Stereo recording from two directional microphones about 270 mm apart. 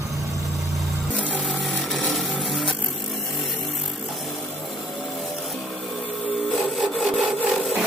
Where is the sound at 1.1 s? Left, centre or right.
Centre.